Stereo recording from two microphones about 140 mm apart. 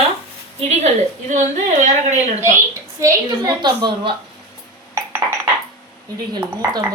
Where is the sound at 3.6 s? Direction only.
35° right (ahead or behind).